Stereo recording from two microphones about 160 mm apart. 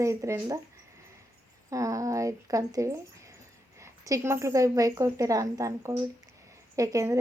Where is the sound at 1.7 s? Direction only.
20° right (ahead or behind).